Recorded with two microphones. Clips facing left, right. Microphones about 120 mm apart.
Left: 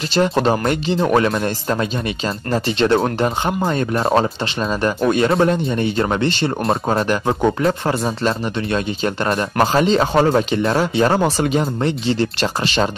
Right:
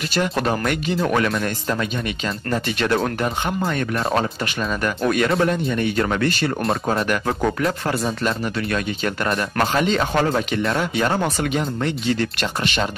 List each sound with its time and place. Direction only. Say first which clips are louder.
0.1 s speech: left 6 dB; 25° left (ahead or behind)